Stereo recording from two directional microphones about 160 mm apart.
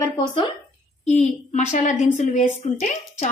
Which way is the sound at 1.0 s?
45° left (ahead or behind).